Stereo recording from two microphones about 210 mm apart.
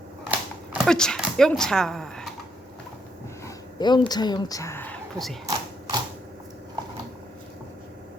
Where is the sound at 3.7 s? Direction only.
20° left (ahead or behind); by 5.4 s 5° left (ahead or behind).